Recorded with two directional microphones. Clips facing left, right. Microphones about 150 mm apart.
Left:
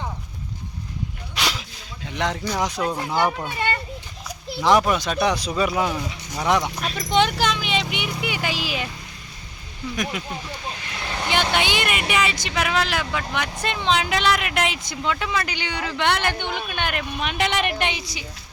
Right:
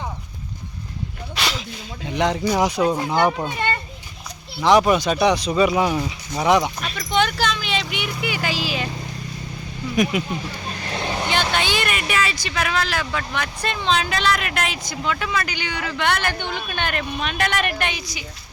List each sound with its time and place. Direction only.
2.0 s speech: centre (ahead or behind)
4.8 s speech: 5° right (ahead or behind)
7.1 s a sound: 25° left (ahead or behind)
9.9 s speech: 10° right (ahead or behind)
10.8 s vehicle: 40° right (ahead or behind)
11.0 s vehicle: 20° right (ahead or behind)
11.5 s speech: 15° left (ahead or behind)